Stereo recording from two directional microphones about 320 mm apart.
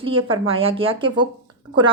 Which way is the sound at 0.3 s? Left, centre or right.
Centre.